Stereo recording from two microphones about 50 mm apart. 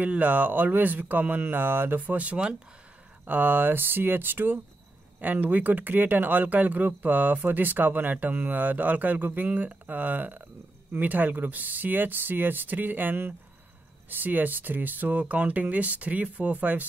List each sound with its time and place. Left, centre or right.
0.0 s speech: right
3.3 s speech: right